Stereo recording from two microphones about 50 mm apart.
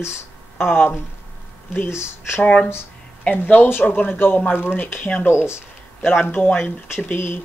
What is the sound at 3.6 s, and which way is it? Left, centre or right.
Speech, left.